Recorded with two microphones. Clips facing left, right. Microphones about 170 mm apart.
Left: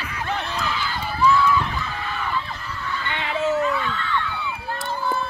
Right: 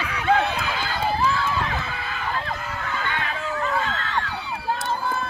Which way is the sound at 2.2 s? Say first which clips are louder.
Right 2 dB; 50° right (ahead or behind).